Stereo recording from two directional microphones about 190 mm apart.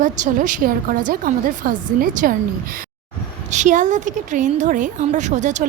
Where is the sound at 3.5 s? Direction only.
40° right (ahead or behind).